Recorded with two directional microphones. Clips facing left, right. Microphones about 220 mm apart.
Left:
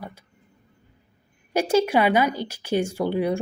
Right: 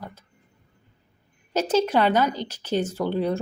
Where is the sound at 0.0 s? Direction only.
10° left (ahead or behind).